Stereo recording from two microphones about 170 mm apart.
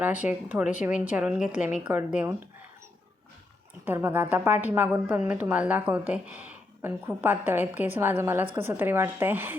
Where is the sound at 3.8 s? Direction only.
10° right (ahead or behind).